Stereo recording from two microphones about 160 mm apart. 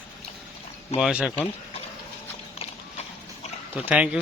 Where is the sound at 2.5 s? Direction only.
40° left (ahead or behind).